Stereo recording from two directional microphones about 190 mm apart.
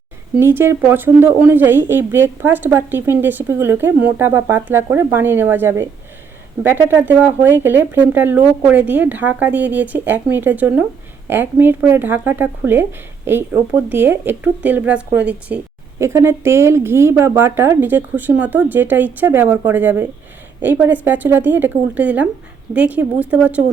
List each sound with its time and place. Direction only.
0.3 s speech: 10° right (ahead or behind)